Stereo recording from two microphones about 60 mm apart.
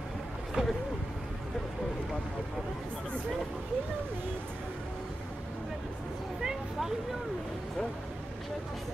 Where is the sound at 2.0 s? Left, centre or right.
Centre.